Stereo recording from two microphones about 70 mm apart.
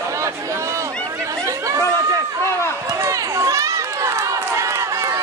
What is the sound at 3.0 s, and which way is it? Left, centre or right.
Run, right.